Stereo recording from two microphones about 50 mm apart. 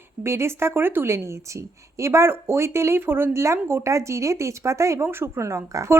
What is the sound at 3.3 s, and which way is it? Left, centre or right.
Speech, right.